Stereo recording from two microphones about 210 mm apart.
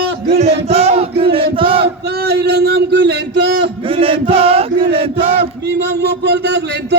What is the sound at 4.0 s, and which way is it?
Chant, 25° right (ahead or behind).